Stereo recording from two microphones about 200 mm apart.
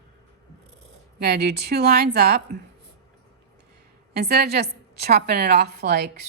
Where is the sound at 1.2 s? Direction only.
55° right (ahead or behind).